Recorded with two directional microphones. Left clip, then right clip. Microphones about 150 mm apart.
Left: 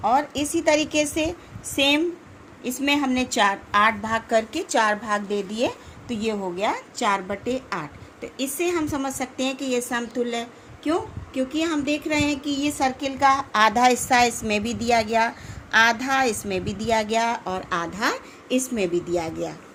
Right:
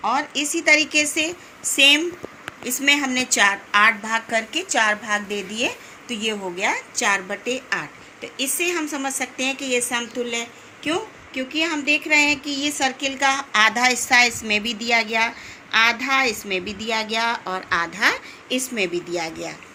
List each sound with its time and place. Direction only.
0.0 s a woman's voice: 90° left; by 10.4 s 70° left (ahead or behind)
10.8 s a woman's voice: 85° left
13.0 s a woman's voice: 50° left (ahead or behind)
17.9 s a woman's voice: 65° left (ahead or behind); by 19.5 s 80° left